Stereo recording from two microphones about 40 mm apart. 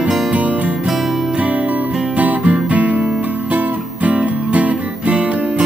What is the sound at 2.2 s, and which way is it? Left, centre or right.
Music, right.